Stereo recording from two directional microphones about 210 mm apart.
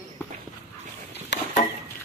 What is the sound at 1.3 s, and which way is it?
Wood, 55° left (ahead or behind).